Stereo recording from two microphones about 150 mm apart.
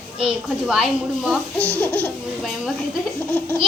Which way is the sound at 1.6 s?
10° left (ahead or behind).